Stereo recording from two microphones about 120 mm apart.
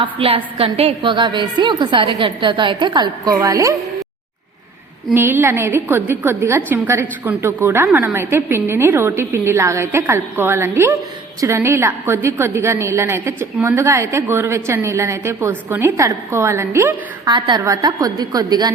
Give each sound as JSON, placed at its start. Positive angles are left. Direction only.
{"t": 0.0, "sound": "a woman's voice", "side_deg": -50}
{"t": 3.4, "sound": "a woman's voice", "side_deg": -25}
{"t": 5.1, "sound": "a woman's voice", "side_deg": -15}
{"t": 17.2, "sound": "a woman's voice", "side_deg": -35}